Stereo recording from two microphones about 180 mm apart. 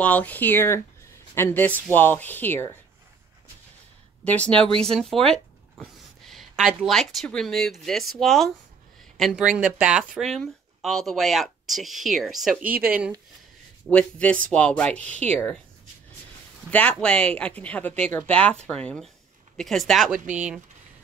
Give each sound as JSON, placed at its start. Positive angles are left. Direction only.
{"t": 0.0, "sound": "speech", "side_deg": 10}
{"t": 4.2, "sound": "speech", "side_deg": 5}
{"t": 4.6, "sound": "speech", "side_deg": -30}
{"t": 4.9, "sound": "speech", "side_deg": 0}
{"t": 13.8, "sound": "speech", "side_deg": 5}
{"t": 16.7, "sound": "speech", "side_deg": 5}